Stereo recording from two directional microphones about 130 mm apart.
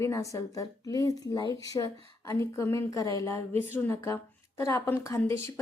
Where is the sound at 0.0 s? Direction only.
25° left (ahead or behind).